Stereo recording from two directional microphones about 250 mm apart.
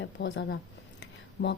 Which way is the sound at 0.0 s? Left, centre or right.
Left.